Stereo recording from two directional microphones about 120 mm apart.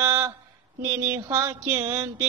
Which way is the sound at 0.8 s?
20° right (ahead or behind).